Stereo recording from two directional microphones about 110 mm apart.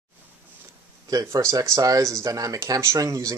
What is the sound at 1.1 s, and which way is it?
Speech, 25° right (ahead or behind).